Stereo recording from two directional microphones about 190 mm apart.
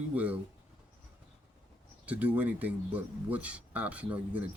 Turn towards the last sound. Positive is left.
turn(degrees=-5)  # may be behind; listen again after turning